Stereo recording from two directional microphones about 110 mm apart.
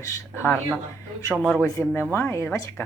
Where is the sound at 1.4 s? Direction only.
10° left (ahead or behind).